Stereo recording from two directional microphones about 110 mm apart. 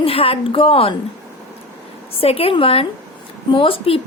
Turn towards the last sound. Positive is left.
turn(degrees=60)  # may be behind; listen again after turning